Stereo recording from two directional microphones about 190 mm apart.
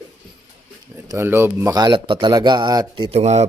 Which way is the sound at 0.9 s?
15° right (ahead or behind).